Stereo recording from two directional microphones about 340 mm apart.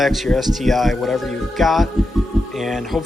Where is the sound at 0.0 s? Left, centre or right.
Centre.